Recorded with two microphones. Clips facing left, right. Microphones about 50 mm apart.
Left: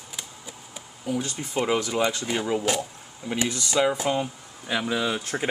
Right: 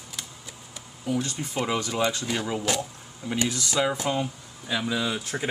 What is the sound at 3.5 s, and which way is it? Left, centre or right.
Speech, centre.